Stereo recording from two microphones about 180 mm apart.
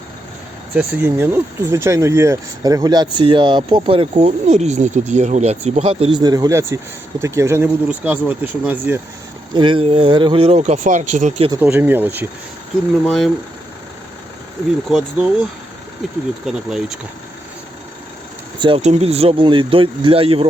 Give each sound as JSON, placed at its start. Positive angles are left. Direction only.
{"t": 0.8, "sound": "speech", "side_deg": -10}
{"t": 9.5, "sound": "speech", "side_deg": -25}
{"t": 11.6, "sound": "speech", "side_deg": -10}
{"t": 13.1, "sound": "speech", "side_deg": 0}
{"t": 14.8, "sound": "speech", "side_deg": 0}
{"t": 16.5, "sound": "speech", "side_deg": -5}
{"t": 18.6, "sound": "speech", "side_deg": -35}